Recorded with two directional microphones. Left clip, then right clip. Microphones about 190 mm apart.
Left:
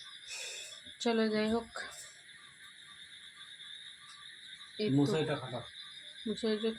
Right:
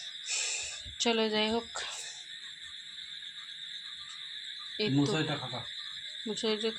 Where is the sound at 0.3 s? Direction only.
25° left (ahead or behind).